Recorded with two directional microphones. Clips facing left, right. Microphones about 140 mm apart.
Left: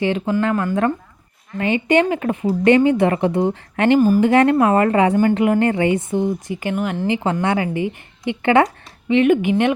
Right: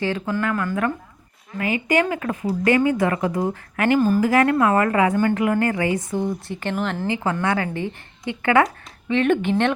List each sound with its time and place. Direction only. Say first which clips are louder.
0.0 s a woman's voice: left 5 dB; 20° left (ahead or behind)
7.1 s a woman's voice: left 4 dB; 20° left (ahead or behind)